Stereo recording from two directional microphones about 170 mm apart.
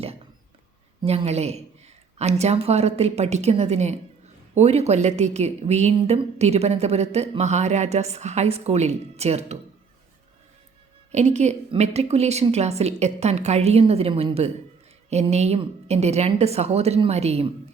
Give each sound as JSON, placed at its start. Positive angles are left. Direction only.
{"t": 1.0, "sound": "a woman's voice", "side_deg": -40}
{"t": 11.1, "sound": "a woman's voice", "side_deg": -40}